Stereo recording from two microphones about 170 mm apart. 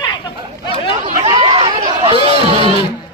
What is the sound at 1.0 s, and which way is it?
Chatter, 35° right (ahead or behind).